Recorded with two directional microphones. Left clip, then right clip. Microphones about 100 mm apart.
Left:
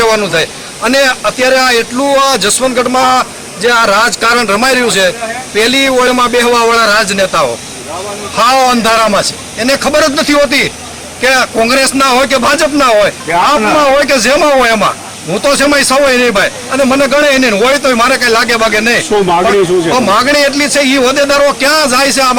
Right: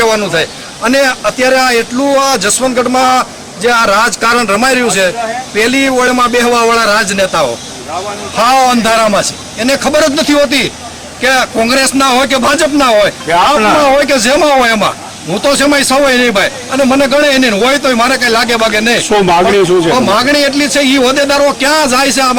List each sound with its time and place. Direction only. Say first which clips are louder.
0.0 s speech: left 1 dB; centre (ahead or behind)
19.1 s speech: right 2 dB; 40° right (ahead or behind)
19.9 s speech: left 1 dB; centre (ahead or behind)